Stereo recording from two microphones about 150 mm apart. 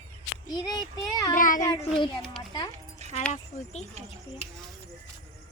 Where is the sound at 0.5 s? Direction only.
25° left (ahead or behind).